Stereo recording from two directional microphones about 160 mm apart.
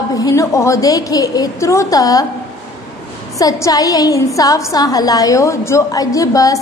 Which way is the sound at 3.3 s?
20° left (ahead or behind).